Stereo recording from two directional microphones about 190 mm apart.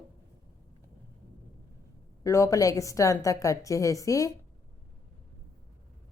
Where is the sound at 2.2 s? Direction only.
15° left (ahead or behind).